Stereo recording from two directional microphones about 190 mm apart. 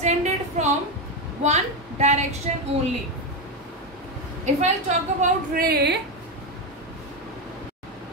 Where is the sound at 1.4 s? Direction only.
35° right (ahead or behind).